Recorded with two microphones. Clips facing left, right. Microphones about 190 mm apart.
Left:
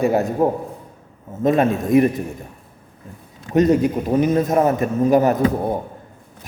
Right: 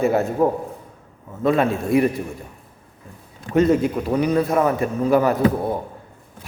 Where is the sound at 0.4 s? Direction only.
25° left (ahead or behind).